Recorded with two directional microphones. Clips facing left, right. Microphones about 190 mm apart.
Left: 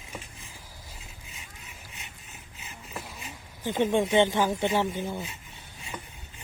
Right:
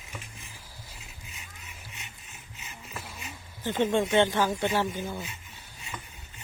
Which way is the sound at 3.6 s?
15° left (ahead or behind).